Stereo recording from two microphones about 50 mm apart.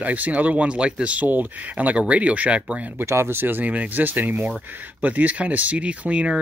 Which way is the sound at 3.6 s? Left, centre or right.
Right.